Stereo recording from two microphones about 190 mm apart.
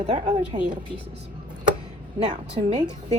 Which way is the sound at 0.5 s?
35° right (ahead or behind).